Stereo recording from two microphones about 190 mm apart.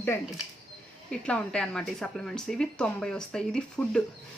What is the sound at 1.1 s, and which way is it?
Speech, 5° left (ahead or behind).